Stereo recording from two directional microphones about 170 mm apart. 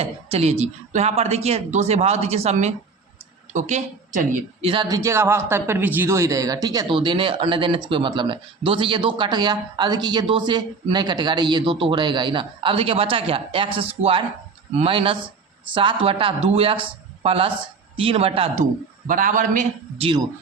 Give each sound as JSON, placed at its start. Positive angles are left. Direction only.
{"t": 0.0, "sound": "speech", "side_deg": -35}
{"t": 4.6, "sound": "a man's voice", "side_deg": -30}
{"t": 20.0, "sound": "speech", "side_deg": -30}